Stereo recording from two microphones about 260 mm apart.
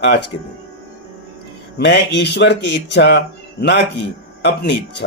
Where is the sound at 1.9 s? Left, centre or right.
Left.